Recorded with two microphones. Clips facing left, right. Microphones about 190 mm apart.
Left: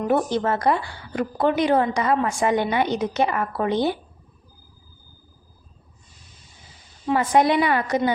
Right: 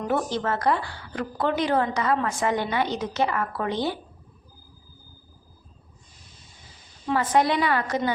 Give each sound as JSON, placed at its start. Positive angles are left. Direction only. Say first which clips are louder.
{"t": 0.0, "sound": "a woman's voice", "louder": "left 4 dB", "side_deg": 15}
{"t": 7.1, "sound": "a woman's voice", "louder": "left 3 dB", "side_deg": 15}